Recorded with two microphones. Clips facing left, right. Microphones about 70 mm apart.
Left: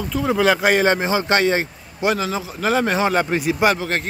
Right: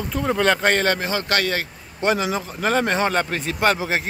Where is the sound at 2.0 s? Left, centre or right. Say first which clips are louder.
Even; centre.